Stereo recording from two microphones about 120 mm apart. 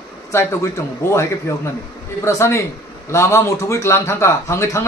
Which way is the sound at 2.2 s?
25° left (ahead or behind).